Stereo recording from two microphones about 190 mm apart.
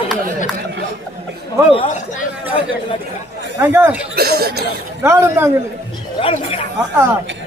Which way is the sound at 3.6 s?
10° right (ahead or behind).